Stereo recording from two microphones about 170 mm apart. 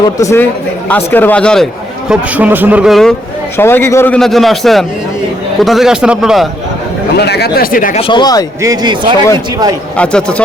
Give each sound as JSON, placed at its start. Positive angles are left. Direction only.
{"t": 0.0, "sound": "speech", "side_deg": 15}
{"t": 2.0, "sound": "a man's voice", "side_deg": -10}
{"t": 3.6, "sound": "a man's voice", "side_deg": 15}
{"t": 7.2, "sound": "speech", "side_deg": 75}
{"t": 7.9, "sound": "speech", "side_deg": 30}
{"t": 8.6, "sound": "speech", "side_deg": -25}
{"t": 10.0, "sound": "a man's voice", "side_deg": 5}